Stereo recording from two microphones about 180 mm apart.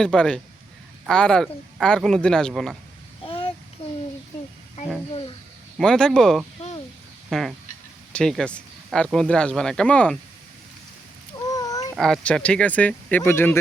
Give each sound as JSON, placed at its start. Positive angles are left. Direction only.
{"t": 0.0, "sound": "speech", "side_deg": 5}
{"t": 3.2, "sound": "child singing", "side_deg": 30}
{"t": 5.7, "sound": "speech", "side_deg": 5}
{"t": 7.3, "sound": "fowl", "side_deg": 0}
{"t": 8.1, "sound": "speech", "side_deg": 5}
{"t": 11.5, "sound": "a sound", "side_deg": 20}
{"t": 11.9, "sound": "speech", "side_deg": 5}